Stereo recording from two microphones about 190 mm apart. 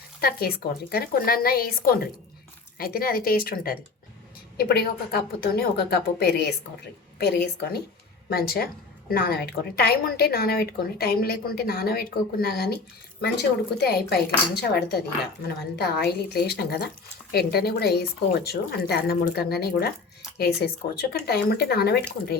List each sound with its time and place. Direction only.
0.2 s a woman's voice: 55° left (ahead or behind)